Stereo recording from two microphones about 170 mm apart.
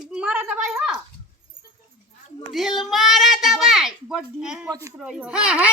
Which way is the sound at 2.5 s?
Centre (ahead or behind).